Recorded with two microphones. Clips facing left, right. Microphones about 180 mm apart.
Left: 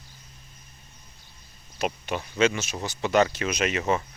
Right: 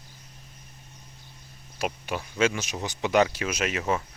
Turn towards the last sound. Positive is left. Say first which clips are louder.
# left 2 dB
turn(degrees=-5)  # may be behind; listen again after turning